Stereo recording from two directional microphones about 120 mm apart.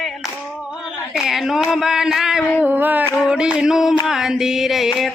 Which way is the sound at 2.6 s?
15° right (ahead or behind).